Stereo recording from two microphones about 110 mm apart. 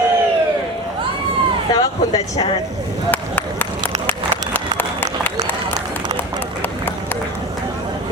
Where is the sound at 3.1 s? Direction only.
15° left (ahead or behind).